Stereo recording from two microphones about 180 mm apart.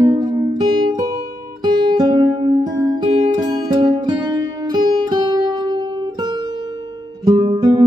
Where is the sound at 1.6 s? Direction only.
25° right (ahead or behind).